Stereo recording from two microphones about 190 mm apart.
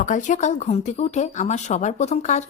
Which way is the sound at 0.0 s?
40° left (ahead or behind).